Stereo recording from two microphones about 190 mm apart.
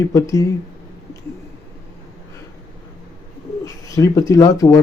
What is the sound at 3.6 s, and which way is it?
Speech, 15° left (ahead or behind).